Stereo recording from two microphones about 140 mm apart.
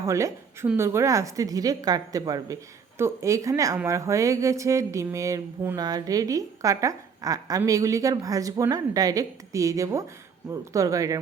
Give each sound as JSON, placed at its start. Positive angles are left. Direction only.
{"t": 0.0, "sound": "a woman's voice", "side_deg": -20}